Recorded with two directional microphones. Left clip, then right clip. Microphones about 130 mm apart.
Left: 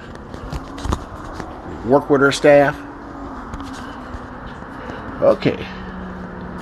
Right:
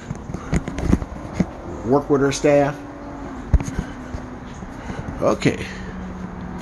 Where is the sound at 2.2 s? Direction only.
15° right (ahead or behind).